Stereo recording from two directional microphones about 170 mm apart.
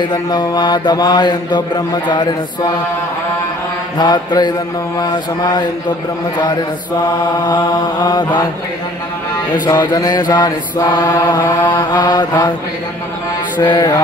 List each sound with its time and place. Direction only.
0.0 s mantra: 25° left (ahead or behind)
4.0 s mantra: 25° left (ahead or behind)
7.4 s mantra: 25° left (ahead or behind)
9.5 s mantra: 20° left (ahead or behind)
13.6 s mantra: 25° left (ahead or behind)